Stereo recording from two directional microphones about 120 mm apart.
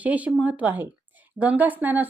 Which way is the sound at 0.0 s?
10° right (ahead or behind).